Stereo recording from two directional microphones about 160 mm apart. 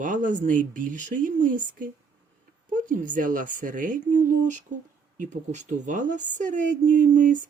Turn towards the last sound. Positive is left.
turn(degrees=-55)  # may be behind; listen again after turning